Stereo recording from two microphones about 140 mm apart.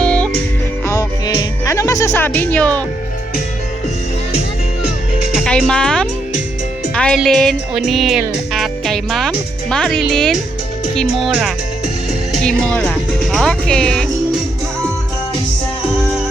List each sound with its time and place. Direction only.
0.0 s music: 10° left (ahead or behind)
0.9 s music: 25° left (ahead or behind)
5.3 s speech: centre (ahead or behind)